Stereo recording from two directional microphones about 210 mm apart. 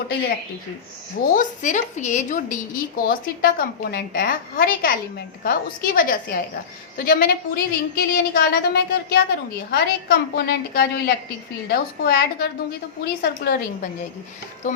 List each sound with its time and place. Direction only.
1.3 s a woman's voice: 40° left (ahead or behind)